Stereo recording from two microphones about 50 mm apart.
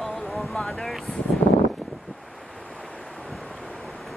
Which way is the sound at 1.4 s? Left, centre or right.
Left.